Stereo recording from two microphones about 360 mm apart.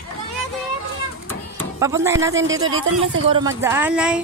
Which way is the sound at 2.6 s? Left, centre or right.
Right.